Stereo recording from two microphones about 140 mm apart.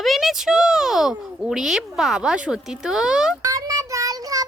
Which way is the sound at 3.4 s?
25° right (ahead or behind).